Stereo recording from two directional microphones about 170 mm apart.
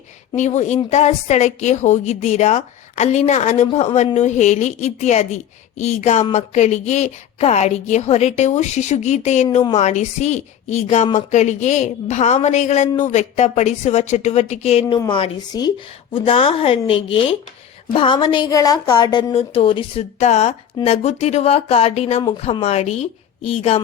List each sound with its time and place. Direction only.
0.3 s a woman's voice: 45° left (ahead or behind); by 19.2 s 25° left (ahead or behind)
19.3 s a woman's voice: 35° left (ahead or behind)